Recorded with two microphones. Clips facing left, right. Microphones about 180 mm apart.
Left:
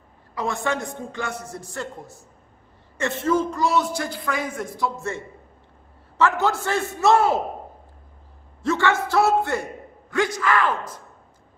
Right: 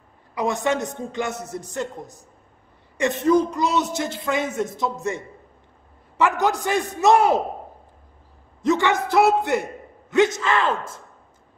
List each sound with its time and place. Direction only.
0.3 s a man's voice: 15° right (ahead or behind)
8.6 s a man's voice: 15° right (ahead or behind)